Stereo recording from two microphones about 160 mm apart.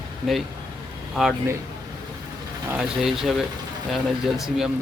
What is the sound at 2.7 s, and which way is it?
Speech, 5° right (ahead or behind).